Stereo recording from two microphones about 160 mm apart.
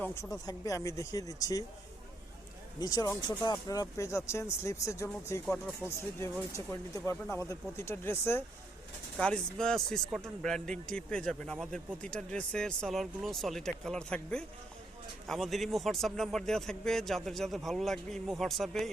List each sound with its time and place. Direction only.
0.0 s speech: 15° left (ahead or behind)
2.8 s speech: 20° left (ahead or behind)
9.1 s a man's voice: 5° left (ahead or behind)
11.5 s a man's voice: 5° right (ahead or behind)